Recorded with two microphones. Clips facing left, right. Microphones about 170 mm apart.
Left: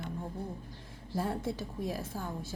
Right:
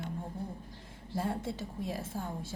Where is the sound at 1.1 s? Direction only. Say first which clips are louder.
Left 1 dB; 25° right (ahead or behind).